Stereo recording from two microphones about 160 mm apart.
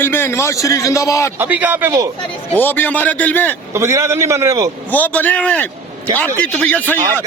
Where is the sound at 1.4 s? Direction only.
10° right (ahead or behind).